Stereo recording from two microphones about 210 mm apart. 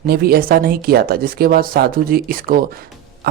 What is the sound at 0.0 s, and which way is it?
Speech, 45° right (ahead or behind).